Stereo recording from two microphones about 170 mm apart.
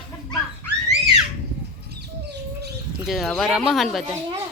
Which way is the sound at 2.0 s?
75° right (ahead or behind).